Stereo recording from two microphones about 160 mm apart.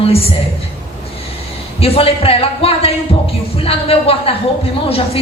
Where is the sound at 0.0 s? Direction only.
40° left (ahead or behind).